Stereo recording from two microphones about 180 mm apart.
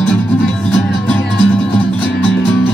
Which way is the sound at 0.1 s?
5° left (ahead or behind).